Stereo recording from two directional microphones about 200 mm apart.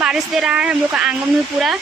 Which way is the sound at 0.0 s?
5° right (ahead or behind).